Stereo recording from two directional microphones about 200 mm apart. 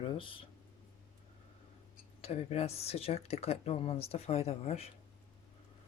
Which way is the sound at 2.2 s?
30° left (ahead or behind).